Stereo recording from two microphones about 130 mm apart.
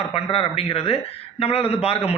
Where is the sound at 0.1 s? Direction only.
45° left (ahead or behind).